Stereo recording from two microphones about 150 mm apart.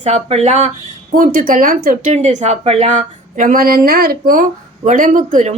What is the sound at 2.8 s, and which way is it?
Speech, 60° right (ahead or behind).